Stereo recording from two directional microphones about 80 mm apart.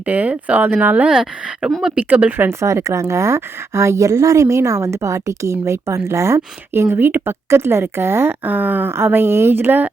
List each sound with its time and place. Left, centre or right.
0.0 s speech: centre
1.1 s speech: centre
2.0 s speech: centre
2.5 s a woman's voice: right